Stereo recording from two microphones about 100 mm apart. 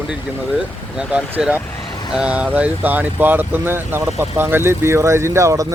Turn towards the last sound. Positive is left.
turn(degrees=-30)  # may be behind; listen again after turning